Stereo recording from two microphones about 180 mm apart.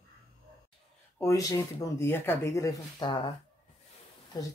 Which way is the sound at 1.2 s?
20° left (ahead or behind).